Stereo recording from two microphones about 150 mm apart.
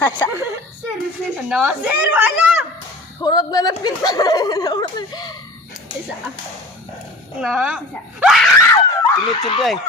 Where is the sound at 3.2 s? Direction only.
25° left (ahead or behind).